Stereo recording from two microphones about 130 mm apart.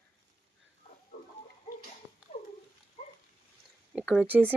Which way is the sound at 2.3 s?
65° left (ahead or behind).